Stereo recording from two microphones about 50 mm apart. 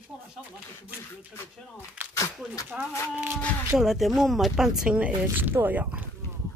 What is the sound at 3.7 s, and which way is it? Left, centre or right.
Speech, centre.